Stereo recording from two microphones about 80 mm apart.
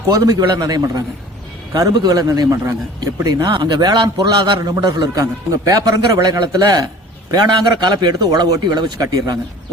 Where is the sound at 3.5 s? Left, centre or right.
Right.